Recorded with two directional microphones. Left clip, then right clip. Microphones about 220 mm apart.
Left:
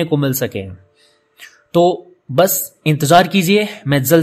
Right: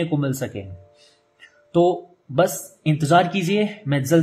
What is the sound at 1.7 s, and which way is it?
Speech, 45° left (ahead or behind).